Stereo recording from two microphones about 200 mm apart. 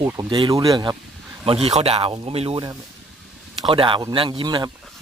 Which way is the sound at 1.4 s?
30° right (ahead or behind).